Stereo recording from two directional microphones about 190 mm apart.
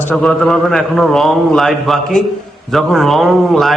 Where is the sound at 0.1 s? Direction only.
5° left (ahead or behind).